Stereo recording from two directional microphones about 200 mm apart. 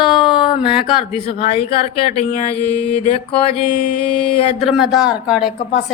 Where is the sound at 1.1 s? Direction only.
30° left (ahead or behind).